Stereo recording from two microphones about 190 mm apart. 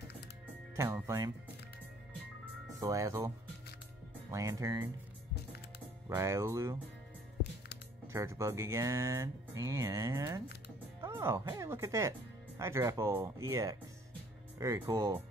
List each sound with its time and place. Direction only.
0.7 s speech: 15° right (ahead or behind)
2.8 s speech: 15° right (ahead or behind)
6.0 s speech: 15° right (ahead or behind)
8.1 s speech: 15° right (ahead or behind)
11.0 s music: 15° right (ahead or behind)
11.4 s speech: 15° right (ahead or behind)